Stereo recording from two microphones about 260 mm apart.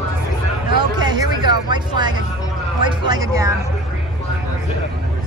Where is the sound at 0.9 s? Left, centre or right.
Centre.